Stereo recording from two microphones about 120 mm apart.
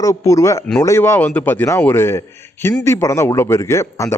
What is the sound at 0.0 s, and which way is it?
A man's voice, 25° left (ahead or behind).